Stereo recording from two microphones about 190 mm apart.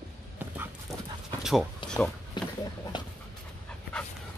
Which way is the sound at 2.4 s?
25° left (ahead or behind).